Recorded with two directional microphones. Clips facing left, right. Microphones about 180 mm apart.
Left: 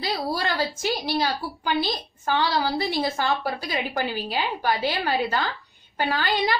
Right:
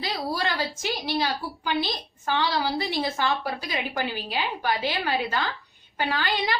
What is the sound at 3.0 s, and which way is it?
A woman's voice, 45° left (ahead or behind).